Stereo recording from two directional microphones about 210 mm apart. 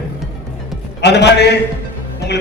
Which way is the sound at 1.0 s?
55° left (ahead or behind).